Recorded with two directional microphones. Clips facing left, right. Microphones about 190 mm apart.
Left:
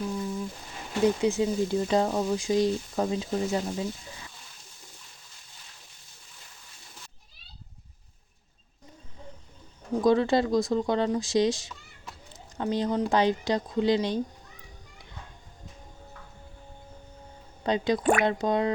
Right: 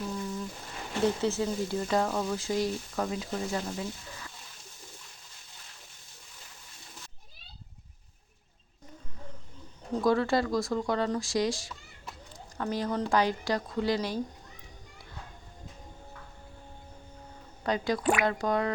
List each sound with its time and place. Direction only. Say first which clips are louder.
1.2 s speech: left 4 dB; 15° left (ahead or behind)
9.9 s speech: left 3 dB; 20° left (ahead or behind)
17.6 s speech: left 3 dB; 20° left (ahead or behind)
18.0 s speech: left 3 dB; 50° left (ahead or behind)
18.3 s speech: left 3 dB; 20° left (ahead or behind)